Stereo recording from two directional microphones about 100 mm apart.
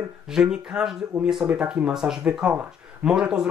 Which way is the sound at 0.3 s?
5° right (ahead or behind).